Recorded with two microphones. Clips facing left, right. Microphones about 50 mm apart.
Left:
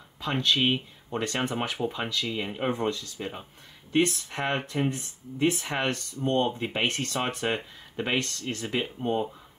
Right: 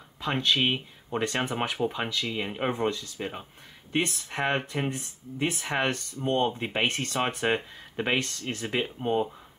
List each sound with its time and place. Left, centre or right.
0.2 s speech: centre